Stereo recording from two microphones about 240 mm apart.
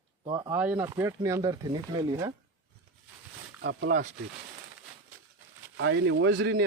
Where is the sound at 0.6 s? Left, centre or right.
Centre.